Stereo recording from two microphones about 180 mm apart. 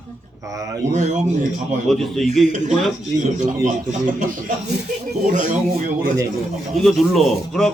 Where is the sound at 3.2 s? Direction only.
40° right (ahead or behind).